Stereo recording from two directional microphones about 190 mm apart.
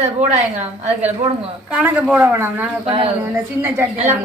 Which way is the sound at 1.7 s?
5° right (ahead or behind).